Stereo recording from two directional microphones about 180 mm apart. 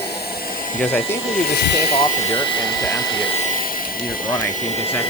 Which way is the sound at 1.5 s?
70° left (ahead or behind).